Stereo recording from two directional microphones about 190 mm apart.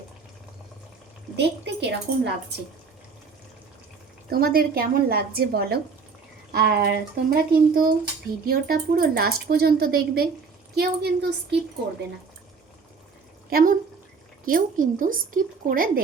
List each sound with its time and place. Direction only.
1.4 s speech: 65° right (ahead or behind)
4.3 s speech: 50° right (ahead or behind)
13.5 s speech: 50° right (ahead or behind)